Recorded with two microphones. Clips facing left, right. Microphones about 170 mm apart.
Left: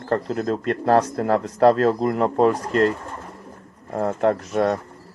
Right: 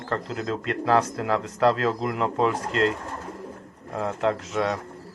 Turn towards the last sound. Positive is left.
turn(degrees=50)  # may be behind; listen again after turning